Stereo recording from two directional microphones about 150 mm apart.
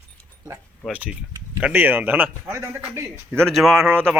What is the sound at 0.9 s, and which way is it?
A man's voice, 10° right (ahead or behind).